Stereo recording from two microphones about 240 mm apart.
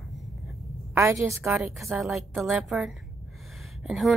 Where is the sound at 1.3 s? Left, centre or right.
Centre.